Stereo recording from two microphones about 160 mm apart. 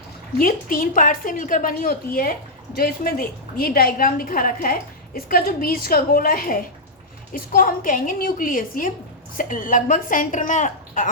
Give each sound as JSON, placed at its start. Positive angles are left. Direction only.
{"t": 0.3, "sound": "a woman's voice", "side_deg": 60}